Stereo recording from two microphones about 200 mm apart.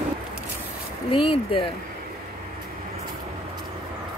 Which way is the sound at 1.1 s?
25° left (ahead or behind).